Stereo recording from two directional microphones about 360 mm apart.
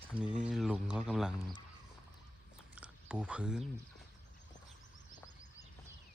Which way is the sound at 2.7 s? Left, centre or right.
Centre.